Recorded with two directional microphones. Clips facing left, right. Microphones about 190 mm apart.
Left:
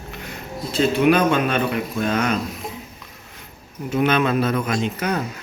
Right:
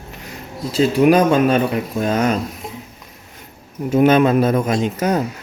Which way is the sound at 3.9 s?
45° right (ahead or behind).